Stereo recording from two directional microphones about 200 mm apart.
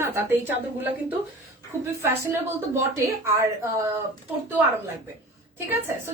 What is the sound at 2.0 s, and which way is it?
A woman's voice, 15° right (ahead or behind).